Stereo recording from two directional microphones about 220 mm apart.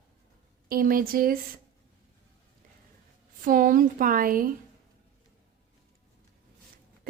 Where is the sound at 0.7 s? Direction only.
40° right (ahead or behind).